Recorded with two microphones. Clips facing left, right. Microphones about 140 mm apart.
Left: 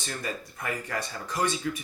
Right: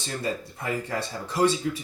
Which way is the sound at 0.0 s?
25° right (ahead or behind).